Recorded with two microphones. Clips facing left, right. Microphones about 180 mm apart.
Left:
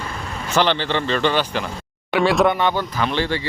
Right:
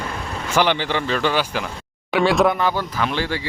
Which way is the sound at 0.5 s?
10° right (ahead or behind).